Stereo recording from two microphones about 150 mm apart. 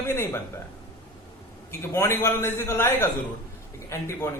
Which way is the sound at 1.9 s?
15° left (ahead or behind).